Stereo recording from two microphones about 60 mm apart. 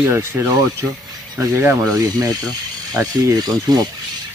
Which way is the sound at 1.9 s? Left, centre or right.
Right.